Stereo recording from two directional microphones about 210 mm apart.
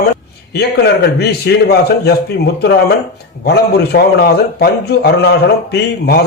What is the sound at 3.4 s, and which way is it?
A man's voice, 50° left (ahead or behind).